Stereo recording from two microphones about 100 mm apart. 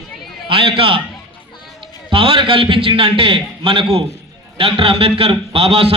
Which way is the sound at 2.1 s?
60° right (ahead or behind).